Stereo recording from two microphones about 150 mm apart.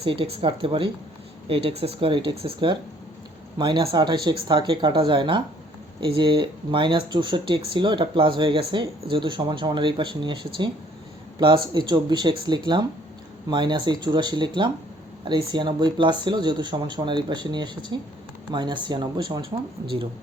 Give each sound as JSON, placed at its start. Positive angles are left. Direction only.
{"t": 0.0, "sound": "speech", "side_deg": -40}
{"t": 3.6, "sound": "speech", "side_deg": -35}